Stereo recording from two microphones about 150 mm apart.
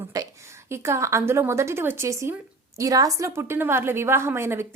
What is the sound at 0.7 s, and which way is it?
A woman's voice, 15° right (ahead or behind).